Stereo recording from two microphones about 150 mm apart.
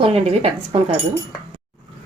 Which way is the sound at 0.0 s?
40° right (ahead or behind).